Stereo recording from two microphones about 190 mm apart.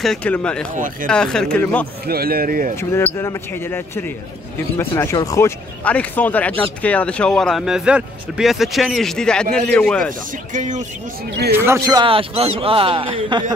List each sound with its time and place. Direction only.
0.0 s speech: 5° left (ahead or behind)
2.0 s speech: 50° right (ahead or behind)
2.7 s speech: 15° left (ahead or behind)
10.5 s speech: 40° right (ahead or behind)
11.5 s speech: 15° right (ahead or behind)
12.1 s speech: 30° right (ahead or behind)